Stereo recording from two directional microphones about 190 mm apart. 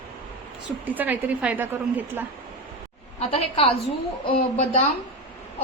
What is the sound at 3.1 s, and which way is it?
Speech, 30° left (ahead or behind).